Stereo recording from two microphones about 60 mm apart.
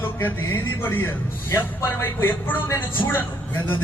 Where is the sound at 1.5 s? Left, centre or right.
Left.